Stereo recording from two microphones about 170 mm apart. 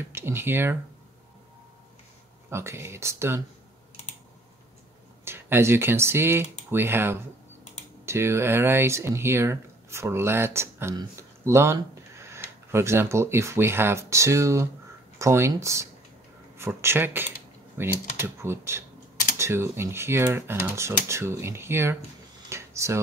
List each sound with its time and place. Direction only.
0.1 s speech: 15° right (ahead or behind)
2.5 s speech: 15° right (ahead or behind)
5.2 s speech: 15° right (ahead or behind)
22.5 s a sound: 15° right (ahead or behind)